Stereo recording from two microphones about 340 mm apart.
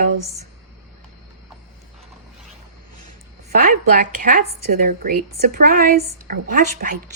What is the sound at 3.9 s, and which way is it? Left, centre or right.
A woman's voice, right.